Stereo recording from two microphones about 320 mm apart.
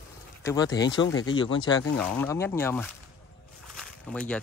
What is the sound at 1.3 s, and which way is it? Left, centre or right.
Speech, centre.